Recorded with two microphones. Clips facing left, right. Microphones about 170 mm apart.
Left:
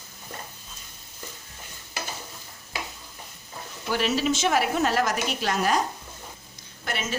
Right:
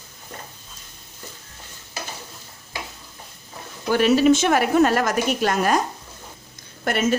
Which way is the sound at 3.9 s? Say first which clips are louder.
Right 9 dB; 50° right (ahead or behind).